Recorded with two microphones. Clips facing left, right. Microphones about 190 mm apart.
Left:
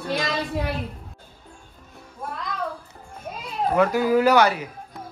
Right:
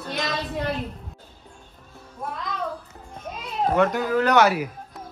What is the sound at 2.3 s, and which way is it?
Music, centre (ahead or behind).